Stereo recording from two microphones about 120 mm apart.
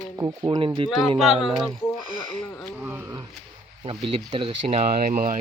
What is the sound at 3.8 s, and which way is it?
Speech, 45° right (ahead or behind).